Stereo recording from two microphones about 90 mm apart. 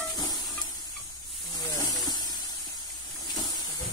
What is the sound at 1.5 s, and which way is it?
Hiss, 45° left (ahead or behind).